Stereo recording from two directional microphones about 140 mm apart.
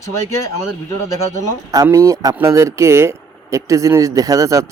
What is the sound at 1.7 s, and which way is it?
Speech, 25° right (ahead or behind).